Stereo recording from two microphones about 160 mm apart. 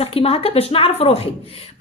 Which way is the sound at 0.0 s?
35° left (ahead or behind).